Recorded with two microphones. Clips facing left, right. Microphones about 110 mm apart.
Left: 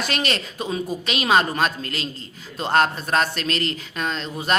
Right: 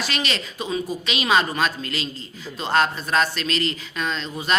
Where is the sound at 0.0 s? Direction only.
50° left (ahead or behind).